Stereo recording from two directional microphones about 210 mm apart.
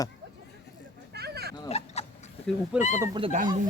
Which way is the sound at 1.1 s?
50° right (ahead or behind).